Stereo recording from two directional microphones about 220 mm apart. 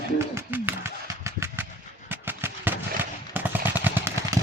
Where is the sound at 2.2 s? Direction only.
10° right (ahead or behind).